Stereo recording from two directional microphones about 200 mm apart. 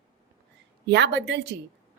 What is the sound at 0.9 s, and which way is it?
A woman's voice, 60° right (ahead or behind).